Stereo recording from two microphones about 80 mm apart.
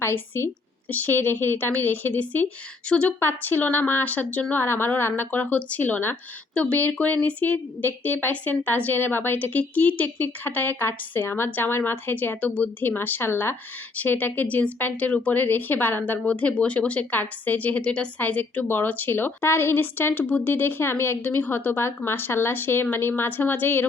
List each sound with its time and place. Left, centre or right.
0.0 s a woman's voice: left; by 3.2 s centre
3.2 s a woman's voice: left
6.5 s a woman's voice: centre